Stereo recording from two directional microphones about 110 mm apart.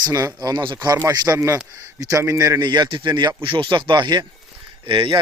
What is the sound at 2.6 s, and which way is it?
Speech, 40° right (ahead or behind).